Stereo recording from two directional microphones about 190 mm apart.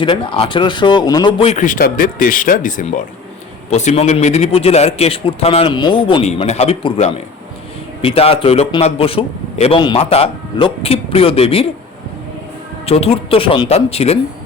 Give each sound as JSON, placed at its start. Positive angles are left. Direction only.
{"t": 0.0, "sound": "a man's voice", "side_deg": 25}
{"t": 12.8, "sound": "a man's voice", "side_deg": 30}